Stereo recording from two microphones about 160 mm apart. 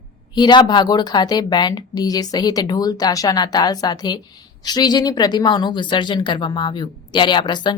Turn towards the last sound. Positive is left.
turn(degrees=25)  # may be behind; listen again after turning